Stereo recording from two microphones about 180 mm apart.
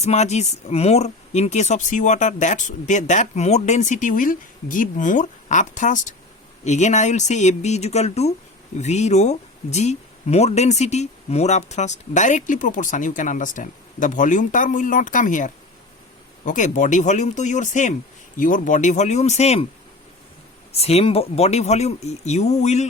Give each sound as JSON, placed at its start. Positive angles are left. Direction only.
{"t": 0.0, "sound": "speech", "side_deg": 40}
{"t": 20.7, "sound": "speech", "side_deg": 35}